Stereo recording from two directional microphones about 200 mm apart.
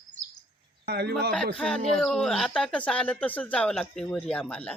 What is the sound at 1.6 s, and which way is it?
Speech, centre (ahead or behind).